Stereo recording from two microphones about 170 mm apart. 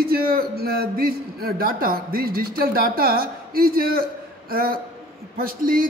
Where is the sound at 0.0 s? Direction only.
60° right (ahead or behind).